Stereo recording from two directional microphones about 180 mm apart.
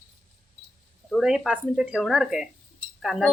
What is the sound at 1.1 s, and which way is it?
Speech, 5° right (ahead or behind).